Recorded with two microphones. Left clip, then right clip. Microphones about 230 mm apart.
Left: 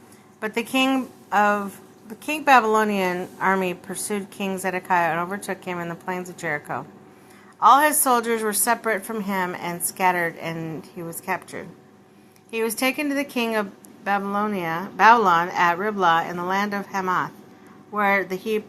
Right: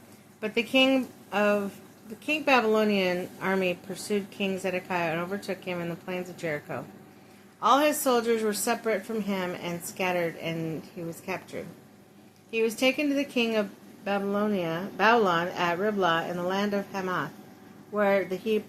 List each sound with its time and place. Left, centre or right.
0.3 s a woman's voice: centre
12.5 s a woman's voice: centre